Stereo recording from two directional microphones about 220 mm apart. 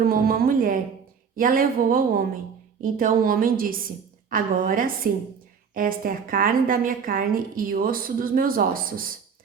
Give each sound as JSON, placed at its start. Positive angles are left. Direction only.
{"t": 0.0, "sound": "music", "side_deg": -40}
{"t": 1.4, "sound": "a woman's voice", "side_deg": -40}